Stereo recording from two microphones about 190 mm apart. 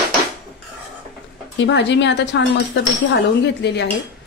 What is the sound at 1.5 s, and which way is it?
A woman's voice, 70° left (ahead or behind).